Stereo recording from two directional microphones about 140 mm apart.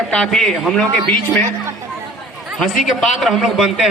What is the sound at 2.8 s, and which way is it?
A man's voice, centre (ahead or behind).